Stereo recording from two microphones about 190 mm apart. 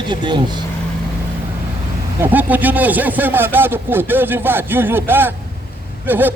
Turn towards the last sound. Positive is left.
turn(degrees=-10)  # may be behind; listen again after turning